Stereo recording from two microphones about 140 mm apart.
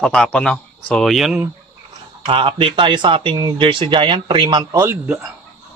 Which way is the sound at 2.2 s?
35° right (ahead or behind).